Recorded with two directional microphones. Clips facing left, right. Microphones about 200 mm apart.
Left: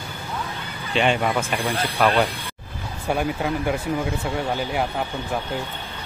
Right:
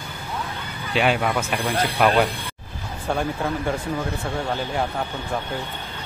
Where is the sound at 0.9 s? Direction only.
5° right (ahead or behind).